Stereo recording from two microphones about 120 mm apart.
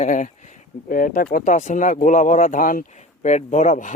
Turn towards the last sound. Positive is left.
turn(degrees=90)